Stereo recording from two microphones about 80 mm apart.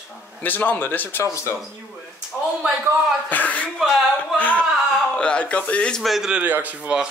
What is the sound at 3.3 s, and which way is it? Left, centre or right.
Speech, centre.